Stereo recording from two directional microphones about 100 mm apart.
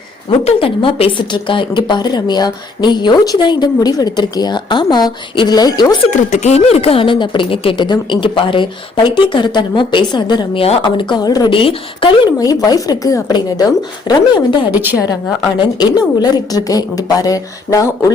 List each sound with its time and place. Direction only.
0.4 s a woman's voice: 65° left (ahead or behind); by 6.0 s 40° left (ahead or behind)
6.5 s a woman's voice: 90° left; by 11.5 s 40° left (ahead or behind)
11.5 s a woman's voice: 65° left (ahead or behind)
12.4 s a woman's voice: 40° left (ahead or behind)